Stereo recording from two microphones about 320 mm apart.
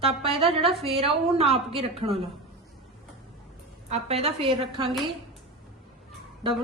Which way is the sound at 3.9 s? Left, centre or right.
Centre.